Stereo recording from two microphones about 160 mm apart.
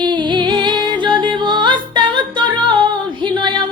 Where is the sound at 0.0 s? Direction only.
30° right (ahead or behind).